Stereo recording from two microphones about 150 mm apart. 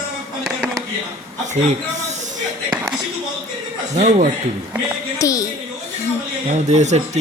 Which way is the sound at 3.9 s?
55° right (ahead or behind).